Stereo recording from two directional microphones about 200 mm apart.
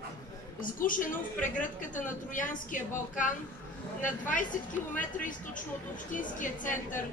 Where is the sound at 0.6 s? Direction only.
45° left (ahead or behind).